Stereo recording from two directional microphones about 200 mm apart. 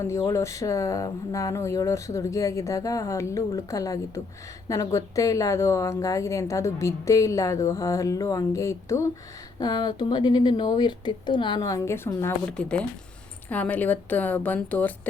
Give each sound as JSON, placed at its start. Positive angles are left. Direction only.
{"t": 0.0, "sound": "a woman's voice", "side_deg": 15}